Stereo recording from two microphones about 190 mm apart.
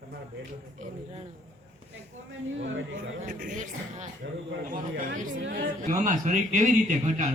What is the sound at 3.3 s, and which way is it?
A man's voice, 40° right (ahead or behind).